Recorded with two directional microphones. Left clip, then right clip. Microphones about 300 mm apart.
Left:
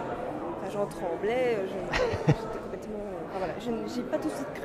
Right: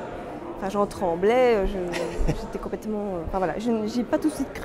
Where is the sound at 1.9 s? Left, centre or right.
Left.